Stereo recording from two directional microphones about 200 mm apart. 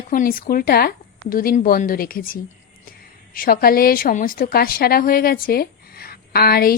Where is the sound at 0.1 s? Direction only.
45° left (ahead or behind).